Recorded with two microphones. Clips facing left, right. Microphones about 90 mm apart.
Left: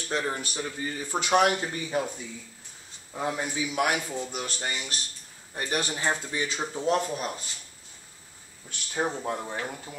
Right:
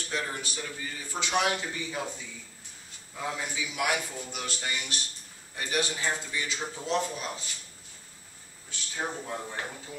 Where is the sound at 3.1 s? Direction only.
40° left (ahead or behind).